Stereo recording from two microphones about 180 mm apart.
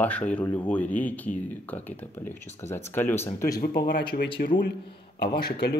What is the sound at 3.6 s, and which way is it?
Speech, 60° left (ahead or behind).